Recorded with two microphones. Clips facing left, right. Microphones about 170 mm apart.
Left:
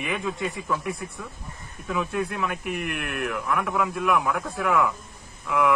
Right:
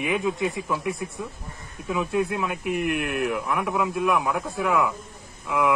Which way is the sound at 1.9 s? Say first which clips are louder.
Right 3 dB; 20° right (ahead or behind).